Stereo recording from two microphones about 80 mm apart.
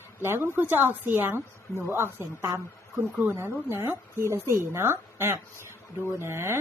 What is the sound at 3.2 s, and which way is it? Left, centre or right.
A woman's voice, right.